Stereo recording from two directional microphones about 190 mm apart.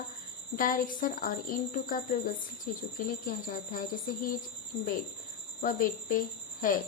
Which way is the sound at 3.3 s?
45° left (ahead or behind).